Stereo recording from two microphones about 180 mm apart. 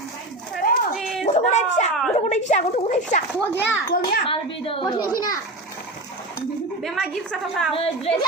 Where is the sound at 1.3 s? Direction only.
40° left (ahead or behind).